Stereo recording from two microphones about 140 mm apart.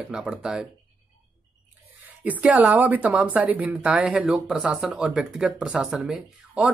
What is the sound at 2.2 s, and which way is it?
Speech, 10° right (ahead or behind).